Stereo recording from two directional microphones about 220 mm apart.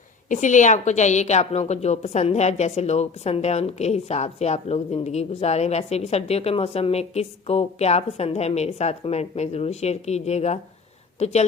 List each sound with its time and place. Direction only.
0.3 s a woman's voice: 35° left (ahead or behind)